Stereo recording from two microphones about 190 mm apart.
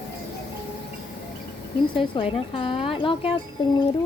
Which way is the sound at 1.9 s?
25° left (ahead or behind).